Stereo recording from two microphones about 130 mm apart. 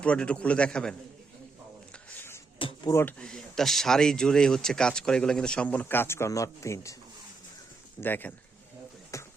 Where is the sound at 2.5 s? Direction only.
40° left (ahead or behind).